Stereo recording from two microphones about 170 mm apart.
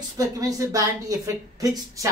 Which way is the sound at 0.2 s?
20° right (ahead or behind).